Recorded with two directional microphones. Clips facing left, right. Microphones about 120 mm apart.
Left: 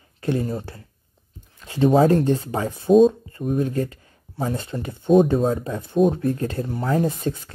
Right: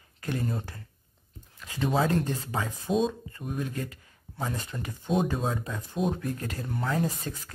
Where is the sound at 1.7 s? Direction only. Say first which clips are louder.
Left 10 dB; 35° left (ahead or behind).